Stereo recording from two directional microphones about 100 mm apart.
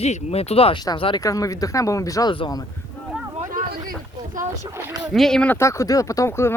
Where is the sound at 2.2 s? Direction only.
55° left (ahead or behind).